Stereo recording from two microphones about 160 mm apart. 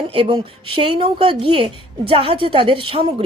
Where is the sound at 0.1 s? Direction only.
35° right (ahead or behind).